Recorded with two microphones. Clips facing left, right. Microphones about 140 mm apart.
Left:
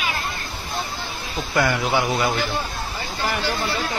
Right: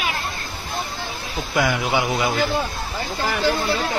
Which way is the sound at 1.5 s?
15° right (ahead or behind).